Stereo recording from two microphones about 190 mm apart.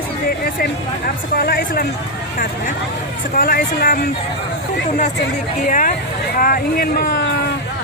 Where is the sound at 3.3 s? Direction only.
50° left (ahead or behind).